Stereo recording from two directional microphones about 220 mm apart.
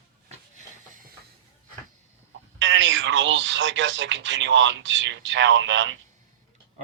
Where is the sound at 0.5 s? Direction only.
40° right (ahead or behind).